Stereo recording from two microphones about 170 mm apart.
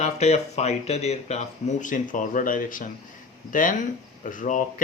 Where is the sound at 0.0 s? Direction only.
40° left (ahead or behind).